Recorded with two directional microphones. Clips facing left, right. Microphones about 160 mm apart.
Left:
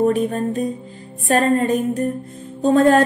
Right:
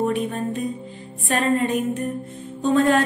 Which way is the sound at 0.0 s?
40° left (ahead or behind).